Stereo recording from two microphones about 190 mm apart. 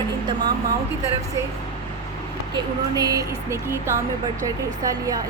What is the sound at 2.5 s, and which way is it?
Speech, 20° right (ahead or behind).